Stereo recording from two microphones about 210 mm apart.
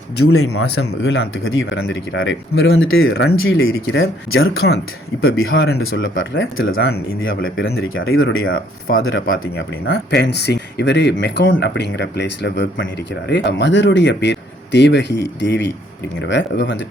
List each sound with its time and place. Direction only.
0.3 s speech: 90° left
1.1 s speech: 60° left (ahead or behind)
10.1 s speech: 55° left (ahead or behind)